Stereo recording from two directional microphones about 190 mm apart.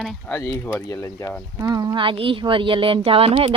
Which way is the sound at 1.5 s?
20° right (ahead or behind).